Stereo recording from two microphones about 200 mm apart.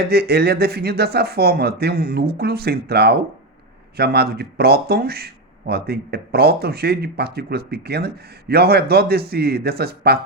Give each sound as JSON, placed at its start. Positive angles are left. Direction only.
{"t": 0.0, "sound": "speech", "side_deg": -55}